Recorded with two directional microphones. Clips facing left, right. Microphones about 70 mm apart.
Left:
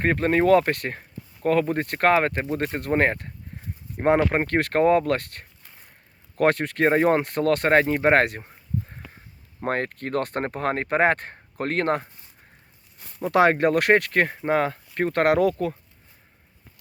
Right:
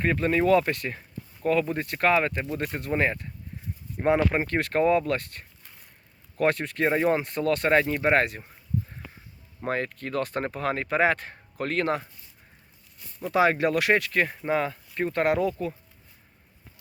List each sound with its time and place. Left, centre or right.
0.0 s speech: left
8.1 s speech: left
9.6 s speech: left
13.0 s a sound: left
13.3 s speech: left